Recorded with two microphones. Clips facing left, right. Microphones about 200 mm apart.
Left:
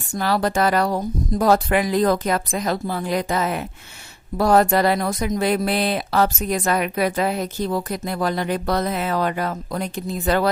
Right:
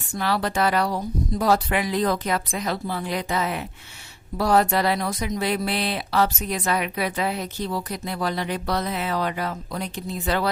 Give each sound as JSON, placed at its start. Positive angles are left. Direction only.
{"t": 0.2, "sound": "speech", "side_deg": 45}